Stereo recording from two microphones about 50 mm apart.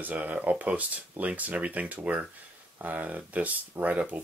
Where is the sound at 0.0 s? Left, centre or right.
Right.